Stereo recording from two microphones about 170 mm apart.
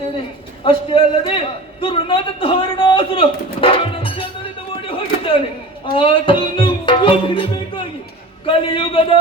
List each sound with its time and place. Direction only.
0.6 s a man's voice: 30° left (ahead or behind)
4.7 s a sound: 30° left (ahead or behind)
5.8 s a man's voice: 30° left (ahead or behind)